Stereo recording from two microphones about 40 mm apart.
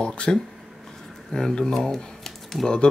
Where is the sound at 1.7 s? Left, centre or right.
Centre.